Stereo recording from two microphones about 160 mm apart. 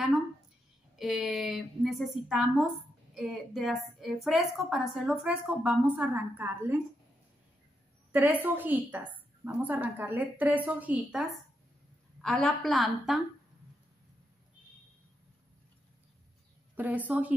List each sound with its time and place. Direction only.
0.9 s a woman's voice: 5° right (ahead or behind)
8.1 s a woman's voice: 10° right (ahead or behind)
16.7 s a woman's voice: 10° right (ahead or behind)